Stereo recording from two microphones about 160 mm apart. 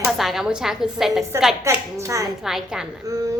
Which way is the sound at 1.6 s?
20° right (ahead or behind).